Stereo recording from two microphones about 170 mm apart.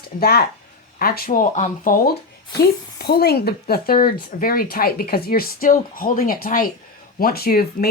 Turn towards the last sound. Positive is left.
turn(degrees=60)  # may be behind; listen again after turning